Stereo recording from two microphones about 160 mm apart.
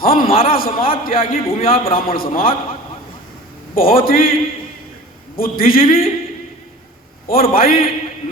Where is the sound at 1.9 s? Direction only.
65° left (ahead or behind).